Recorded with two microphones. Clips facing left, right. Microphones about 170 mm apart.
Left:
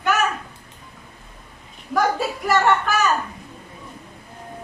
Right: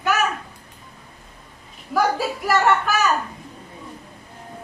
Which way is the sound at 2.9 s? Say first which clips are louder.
Even; centre (ahead or behind).